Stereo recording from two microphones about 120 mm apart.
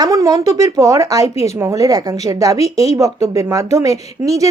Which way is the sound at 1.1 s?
60° left (ahead or behind).